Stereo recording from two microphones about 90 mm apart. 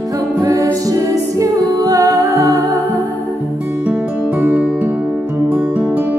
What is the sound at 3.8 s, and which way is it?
Music, 15° right (ahead or behind).